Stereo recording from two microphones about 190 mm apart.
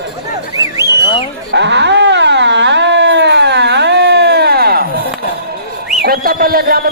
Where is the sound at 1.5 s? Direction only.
65° right (ahead or behind).